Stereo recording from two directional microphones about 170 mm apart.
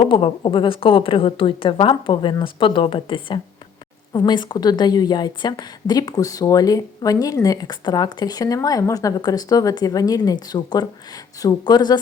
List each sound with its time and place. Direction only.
0.1 s a woman's voice: 30° left (ahead or behind)